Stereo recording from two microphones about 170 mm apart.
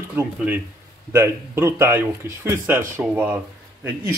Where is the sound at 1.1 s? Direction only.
15° right (ahead or behind).